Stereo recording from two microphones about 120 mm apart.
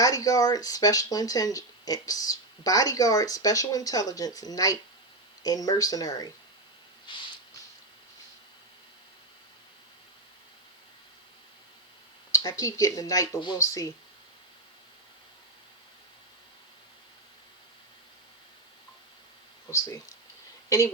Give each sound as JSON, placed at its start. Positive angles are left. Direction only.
{"t": 0.0, "sound": "speech", "side_deg": 30}
{"t": 7.1, "sound": "a sound", "side_deg": 40}
{"t": 12.3, "sound": "speech", "side_deg": 30}
{"t": 20.7, "sound": "a woman's voice", "side_deg": 25}